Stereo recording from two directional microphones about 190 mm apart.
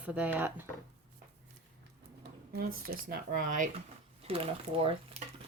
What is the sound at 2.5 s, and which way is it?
Speech, 50° right (ahead or behind).